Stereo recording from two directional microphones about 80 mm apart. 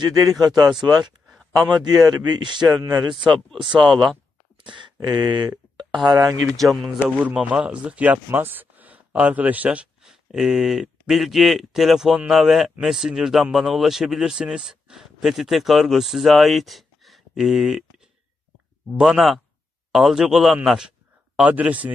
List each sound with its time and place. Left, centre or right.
0.2 s speech: right
0.6 s speech: centre
1.7 s speech: right
3.1 s speech: right
5.0 s speech: right
6.0 s speech: right
6.5 s speech: centre
7.1 s a man's voice: centre
10.0 s speech: centre
21.4 s a man's voice: centre